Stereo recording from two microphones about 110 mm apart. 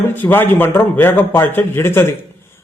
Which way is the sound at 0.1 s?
20° left (ahead or behind).